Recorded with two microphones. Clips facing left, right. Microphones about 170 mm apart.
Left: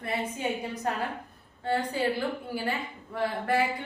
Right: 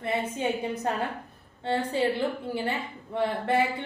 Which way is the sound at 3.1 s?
25° right (ahead or behind).